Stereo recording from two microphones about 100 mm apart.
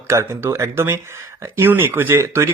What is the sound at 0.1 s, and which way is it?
Speech, 25° right (ahead or behind).